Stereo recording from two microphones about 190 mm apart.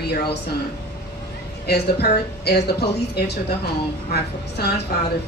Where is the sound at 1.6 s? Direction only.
60° left (ahead or behind).